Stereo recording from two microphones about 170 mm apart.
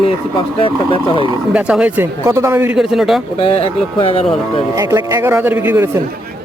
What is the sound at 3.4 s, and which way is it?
Speech, 35° left (ahead or behind).